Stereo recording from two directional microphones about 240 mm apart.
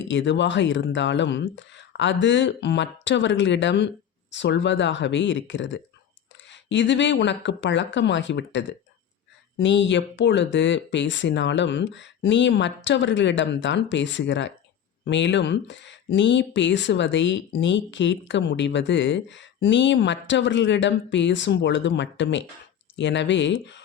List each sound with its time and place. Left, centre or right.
0.1 s speech: left